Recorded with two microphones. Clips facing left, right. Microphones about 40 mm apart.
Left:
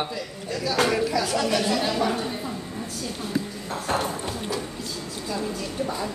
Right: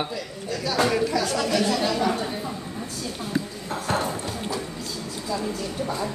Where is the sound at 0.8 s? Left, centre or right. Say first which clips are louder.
Right 2 dB; centre.